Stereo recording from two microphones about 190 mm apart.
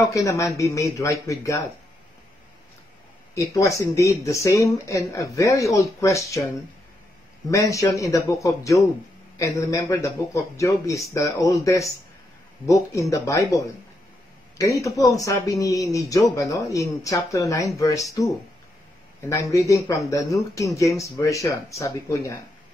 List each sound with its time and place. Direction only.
0.1 s speech: 15° left (ahead or behind)
3.3 s speech: 15° left (ahead or behind)
19.5 s speech: 15° left (ahead or behind)